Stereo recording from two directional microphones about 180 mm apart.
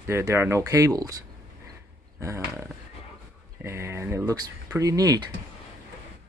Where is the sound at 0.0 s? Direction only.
15° right (ahead or behind).